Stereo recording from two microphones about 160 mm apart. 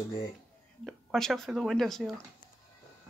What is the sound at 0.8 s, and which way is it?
Speech, centre (ahead or behind).